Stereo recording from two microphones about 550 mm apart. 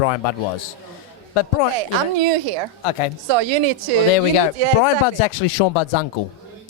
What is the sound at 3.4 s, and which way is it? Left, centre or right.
Speech, right.